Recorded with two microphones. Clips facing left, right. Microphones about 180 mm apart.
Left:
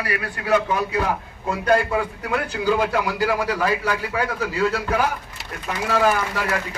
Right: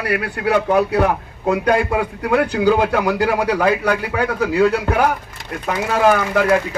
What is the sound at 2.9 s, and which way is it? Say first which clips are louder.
A man's voice: right 4 dB; 65° right (ahead or behind).